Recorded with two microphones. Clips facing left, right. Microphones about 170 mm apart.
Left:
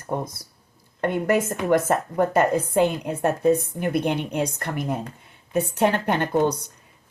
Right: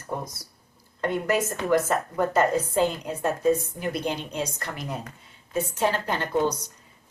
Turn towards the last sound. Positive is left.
turn(degrees=60)  # may be behind; listen again after turning